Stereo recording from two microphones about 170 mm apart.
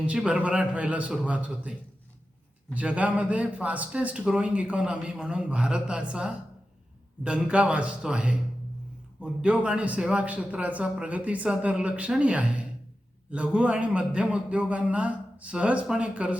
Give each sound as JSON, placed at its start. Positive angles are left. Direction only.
{"t": 0.0, "sound": "a man's voice", "side_deg": -5}
{"t": 2.7, "sound": "a man's voice", "side_deg": -10}
{"t": 9.4, "sound": "a man's voice", "side_deg": -5}